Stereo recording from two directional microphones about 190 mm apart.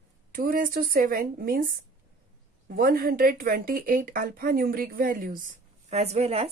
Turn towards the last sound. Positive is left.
turn(degrees=-35)  # may be behind; listen again after turning